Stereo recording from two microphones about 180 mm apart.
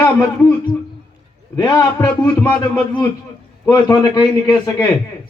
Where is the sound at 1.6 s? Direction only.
20° left (ahead or behind).